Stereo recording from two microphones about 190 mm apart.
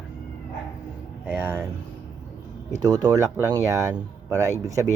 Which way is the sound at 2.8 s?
20° right (ahead or behind).